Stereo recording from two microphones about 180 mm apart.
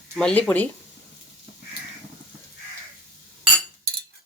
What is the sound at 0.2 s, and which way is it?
Speech, 5° left (ahead or behind).